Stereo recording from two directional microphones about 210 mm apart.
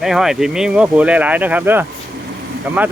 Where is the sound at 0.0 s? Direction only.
Centre (ahead or behind).